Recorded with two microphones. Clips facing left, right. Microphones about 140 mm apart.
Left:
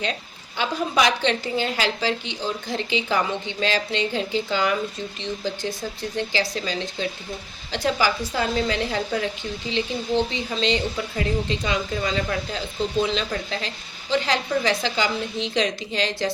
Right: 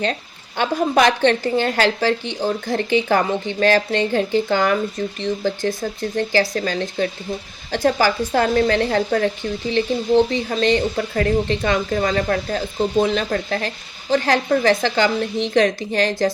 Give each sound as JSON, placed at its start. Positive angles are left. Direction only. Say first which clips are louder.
{"t": 0.0, "sound": "speech", "louder": "right 5 dB", "side_deg": -55}
{"t": 10.5, "sound": "speech", "louder": "right 6 dB", "side_deg": -50}